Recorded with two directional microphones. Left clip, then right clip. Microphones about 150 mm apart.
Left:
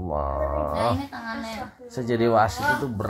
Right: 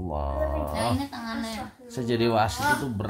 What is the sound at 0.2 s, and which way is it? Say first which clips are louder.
Speech: left 2 dB; 25° right (ahead or behind).